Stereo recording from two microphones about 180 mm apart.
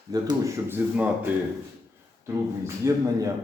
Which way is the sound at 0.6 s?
10° right (ahead or behind).